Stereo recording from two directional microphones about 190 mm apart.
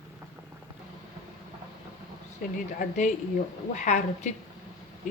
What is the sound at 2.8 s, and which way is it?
A woman's voice, 40° left (ahead or behind).